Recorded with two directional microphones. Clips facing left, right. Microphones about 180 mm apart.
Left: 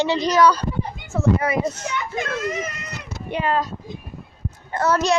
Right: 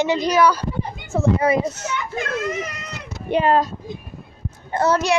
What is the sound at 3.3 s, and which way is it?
Speech, 30° right (ahead or behind).